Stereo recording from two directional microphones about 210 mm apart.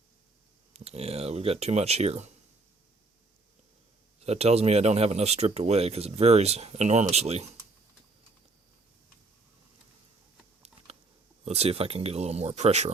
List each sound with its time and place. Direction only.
0.7 s speech: 30° right (ahead or behind)
4.2 s speech: 30° right (ahead or behind)
11.4 s speech: 30° right (ahead or behind)